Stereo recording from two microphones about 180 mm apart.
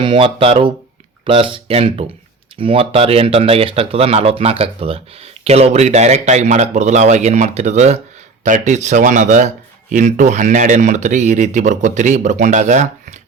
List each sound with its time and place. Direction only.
0.0 s speech: 30° right (ahead or behind)